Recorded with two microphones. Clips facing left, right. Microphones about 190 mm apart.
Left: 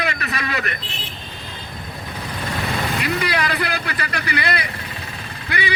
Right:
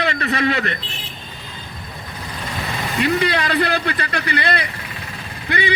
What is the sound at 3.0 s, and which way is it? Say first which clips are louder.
A man's voice: right 7 dB; 30° right (ahead or behind).